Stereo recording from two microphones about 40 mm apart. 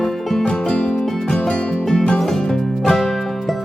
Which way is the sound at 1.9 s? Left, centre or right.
Centre.